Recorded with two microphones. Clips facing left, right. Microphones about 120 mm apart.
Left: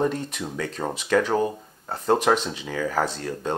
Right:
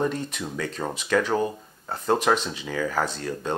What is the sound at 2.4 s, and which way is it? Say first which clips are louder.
Speech: even; 35° left (ahead or behind).